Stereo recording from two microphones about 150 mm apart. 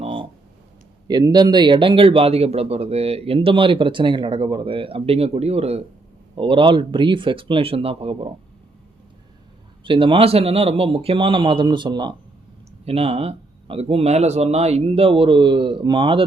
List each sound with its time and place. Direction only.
0.0 s a sound: 35° right (ahead or behind)
1.0 s speech: 30° right (ahead or behind)
9.8 s speech: 35° right (ahead or behind)
12.8 s speech: 40° right (ahead or behind)